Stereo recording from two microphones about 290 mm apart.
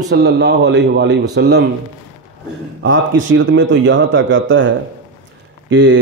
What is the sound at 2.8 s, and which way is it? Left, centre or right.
A man's voice, right.